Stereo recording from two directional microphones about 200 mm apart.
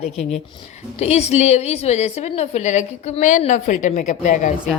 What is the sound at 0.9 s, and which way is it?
A woman's voice, 30° left (ahead or behind).